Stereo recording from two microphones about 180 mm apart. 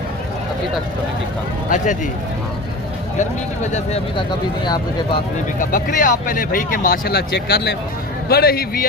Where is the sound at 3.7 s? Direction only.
35° left (ahead or behind).